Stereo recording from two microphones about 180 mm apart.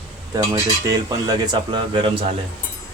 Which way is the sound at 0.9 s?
20° right (ahead or behind).